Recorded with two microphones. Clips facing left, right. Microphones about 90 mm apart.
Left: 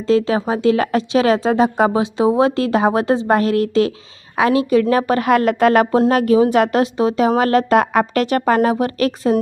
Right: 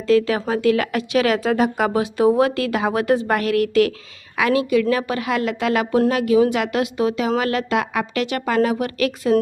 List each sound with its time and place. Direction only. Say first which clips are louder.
0.1 s speech: left 1 dB; 25° left (ahead or behind)